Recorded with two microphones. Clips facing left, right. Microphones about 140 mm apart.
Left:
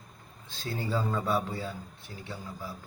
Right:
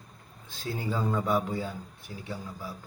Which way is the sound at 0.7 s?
10° right (ahead or behind).